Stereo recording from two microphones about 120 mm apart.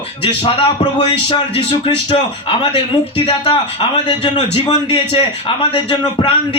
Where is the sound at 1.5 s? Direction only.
50° left (ahead or behind).